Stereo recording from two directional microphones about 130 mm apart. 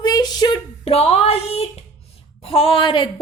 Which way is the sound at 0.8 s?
50° left (ahead or behind).